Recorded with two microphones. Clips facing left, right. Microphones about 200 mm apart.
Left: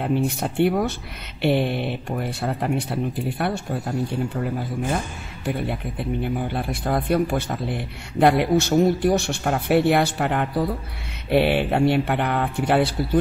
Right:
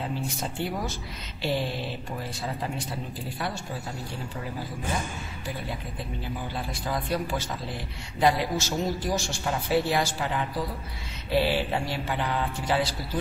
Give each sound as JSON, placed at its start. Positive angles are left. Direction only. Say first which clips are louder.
{"t": 0.0, "sound": "speech", "louder": "left 9 dB", "side_deg": 65}
{"t": 4.9, "sound": "speech", "louder": "left 4 dB", "side_deg": 60}